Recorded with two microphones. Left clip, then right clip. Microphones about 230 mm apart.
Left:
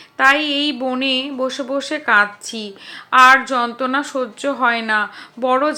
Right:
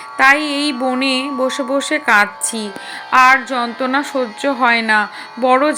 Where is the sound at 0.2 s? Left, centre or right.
Right.